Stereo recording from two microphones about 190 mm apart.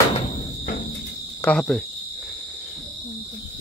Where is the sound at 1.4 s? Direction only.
Centre (ahead or behind).